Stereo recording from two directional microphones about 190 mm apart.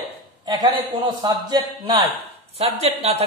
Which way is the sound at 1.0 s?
20° right (ahead or behind).